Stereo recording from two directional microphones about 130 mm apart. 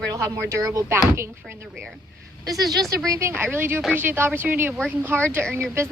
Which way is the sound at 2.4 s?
30° right (ahead or behind).